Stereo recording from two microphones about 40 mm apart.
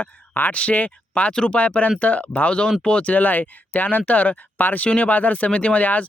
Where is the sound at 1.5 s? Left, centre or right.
Left.